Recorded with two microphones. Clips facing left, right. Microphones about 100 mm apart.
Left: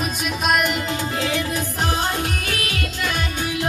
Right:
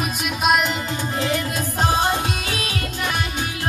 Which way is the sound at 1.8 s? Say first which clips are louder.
Right 4 dB; 15° right (ahead or behind).